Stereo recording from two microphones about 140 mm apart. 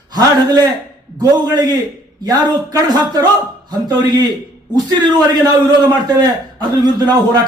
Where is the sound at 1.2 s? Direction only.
30° right (ahead or behind).